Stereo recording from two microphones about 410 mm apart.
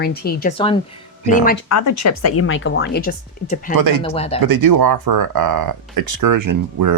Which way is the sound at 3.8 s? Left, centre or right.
Right.